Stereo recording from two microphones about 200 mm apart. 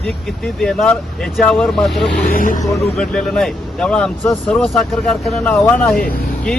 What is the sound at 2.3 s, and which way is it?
Speech, 45° left (ahead or behind).